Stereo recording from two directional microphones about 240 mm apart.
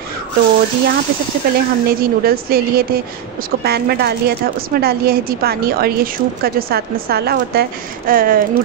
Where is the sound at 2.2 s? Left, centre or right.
Right.